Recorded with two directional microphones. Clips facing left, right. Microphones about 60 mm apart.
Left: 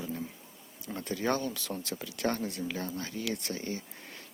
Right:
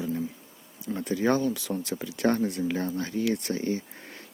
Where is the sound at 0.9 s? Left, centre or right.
Right.